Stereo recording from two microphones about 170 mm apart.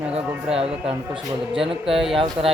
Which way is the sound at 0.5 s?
35° right (ahead or behind).